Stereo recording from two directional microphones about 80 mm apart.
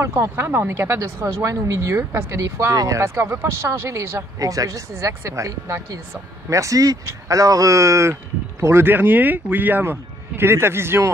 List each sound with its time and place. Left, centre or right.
0.0 s speech: right
2.0 s speech: right
3.0 s speech: right
4.4 s speech: right